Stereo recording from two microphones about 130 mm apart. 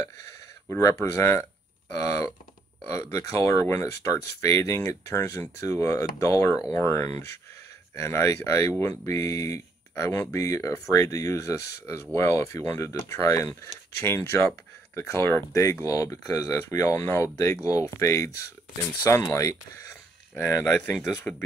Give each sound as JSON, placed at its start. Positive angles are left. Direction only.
{"t": 0.7, "sound": "speech", "side_deg": 20}